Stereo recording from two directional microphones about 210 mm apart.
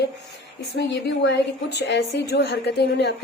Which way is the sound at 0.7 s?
55° left (ahead or behind).